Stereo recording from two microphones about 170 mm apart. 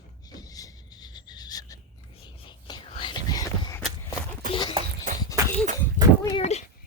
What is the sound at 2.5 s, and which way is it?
Whispering, 25° left (ahead or behind).